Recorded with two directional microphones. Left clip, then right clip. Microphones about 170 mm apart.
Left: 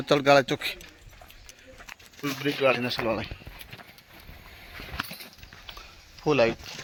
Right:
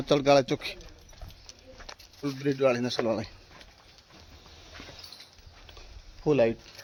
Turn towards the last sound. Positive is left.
turn(degrees=-15)  # may be behind; listen again after turning